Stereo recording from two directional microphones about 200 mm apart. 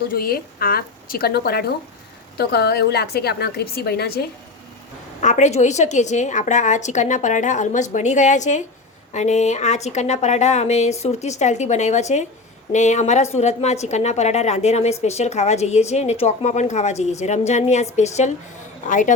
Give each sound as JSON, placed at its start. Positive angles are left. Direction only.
{"t": 0.1, "sound": "a woman's voice", "side_deg": 50}
{"t": 5.2, "sound": "a woman's voice", "side_deg": 35}